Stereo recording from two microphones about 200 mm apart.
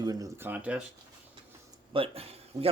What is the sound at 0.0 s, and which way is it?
Speech, 20° right (ahead or behind).